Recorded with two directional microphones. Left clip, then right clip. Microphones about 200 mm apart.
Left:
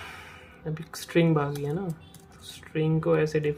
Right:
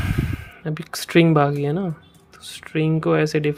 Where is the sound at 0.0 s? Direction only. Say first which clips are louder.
Right 12 dB; 40° right (ahead or behind).